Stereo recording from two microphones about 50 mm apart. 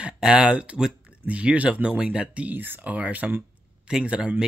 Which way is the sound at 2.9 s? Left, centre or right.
Right.